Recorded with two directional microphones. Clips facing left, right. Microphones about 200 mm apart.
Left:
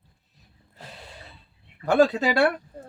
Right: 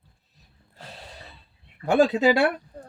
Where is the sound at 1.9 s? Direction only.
10° right (ahead or behind).